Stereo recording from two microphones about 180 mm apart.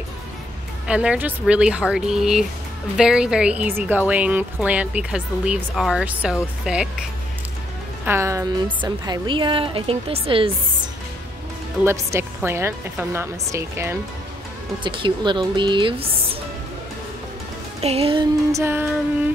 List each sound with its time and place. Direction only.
0.8 s speech: 5° right (ahead or behind)
8.0 s speech: 15° right (ahead or behind); by 10.5 s 30° right (ahead or behind)
11.8 s speech: 15° right (ahead or behind)
14.8 s speech: 25° right (ahead or behind)
17.7 s speech: 35° right (ahead or behind); by 18.9 s 15° right (ahead or behind)